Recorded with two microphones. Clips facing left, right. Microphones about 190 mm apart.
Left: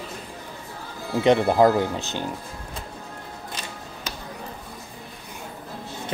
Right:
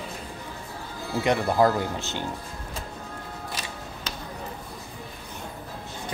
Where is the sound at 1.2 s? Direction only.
20° left (ahead or behind).